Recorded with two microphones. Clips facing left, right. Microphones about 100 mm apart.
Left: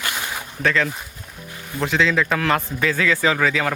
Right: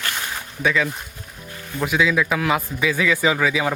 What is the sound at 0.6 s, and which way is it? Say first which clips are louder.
A man's voice: even; 10° right (ahead or behind).